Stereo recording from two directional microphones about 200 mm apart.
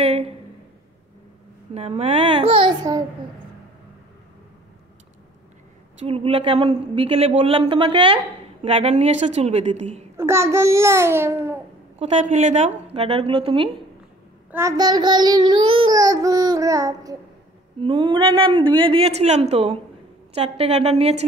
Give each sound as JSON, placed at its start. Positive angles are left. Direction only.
{"t": 0.0, "sound": "a sound", "side_deg": -30}
{"t": 1.7, "sound": "speech", "side_deg": -30}
{"t": 5.9, "sound": "a woman's voice", "side_deg": -30}
{"t": 10.1, "sound": "child singing", "side_deg": -15}
{"t": 12.0, "sound": "a woman's voice", "side_deg": -35}
{"t": 14.5, "sound": "child singing", "side_deg": -15}
{"t": 17.8, "sound": "a woman's voice", "side_deg": -25}